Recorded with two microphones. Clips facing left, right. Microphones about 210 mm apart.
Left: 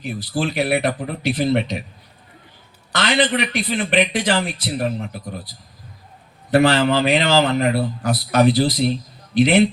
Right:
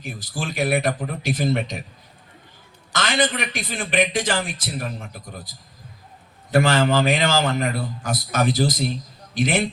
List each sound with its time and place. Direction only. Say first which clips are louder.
0.0 s a man's voice: left 7 dB; 45° right (ahead or behind)
2.9 s a man's voice: left 3 dB; 45° right (ahead or behind)